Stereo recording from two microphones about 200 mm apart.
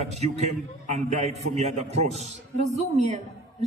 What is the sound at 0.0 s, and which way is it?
A woman's voice, 35° right (ahead or behind).